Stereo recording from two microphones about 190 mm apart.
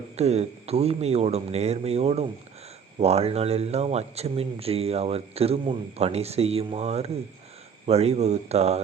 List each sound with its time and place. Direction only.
0.2 s speech: 35° right (ahead or behind)